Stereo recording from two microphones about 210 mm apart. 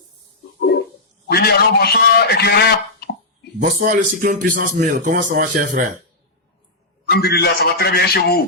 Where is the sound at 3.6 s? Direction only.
40° right (ahead or behind).